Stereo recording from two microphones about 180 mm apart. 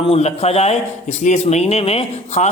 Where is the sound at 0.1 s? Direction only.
35° left (ahead or behind).